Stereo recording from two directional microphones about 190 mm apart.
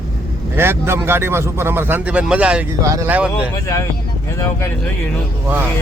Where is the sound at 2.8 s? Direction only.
15° right (ahead or behind).